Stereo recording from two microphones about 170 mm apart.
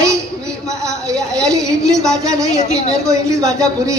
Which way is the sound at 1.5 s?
20° right (ahead or behind).